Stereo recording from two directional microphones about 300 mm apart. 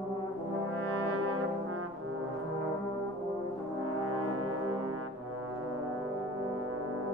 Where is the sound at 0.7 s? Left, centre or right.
Right.